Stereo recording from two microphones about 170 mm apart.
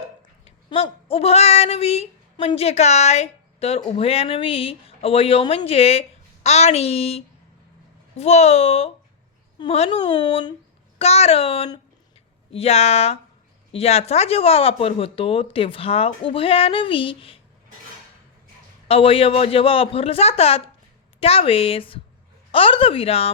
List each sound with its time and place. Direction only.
0.4 s speech: 35° left (ahead or behind)
10.1 s speech: 25° left (ahead or behind)
10.9 s speech: 40° left (ahead or behind)
18.9 s speech: 35° left (ahead or behind)